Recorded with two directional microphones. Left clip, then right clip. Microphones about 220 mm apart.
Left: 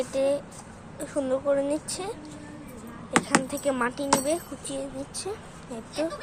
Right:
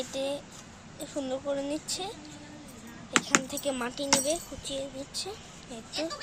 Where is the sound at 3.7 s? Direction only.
5° left (ahead or behind).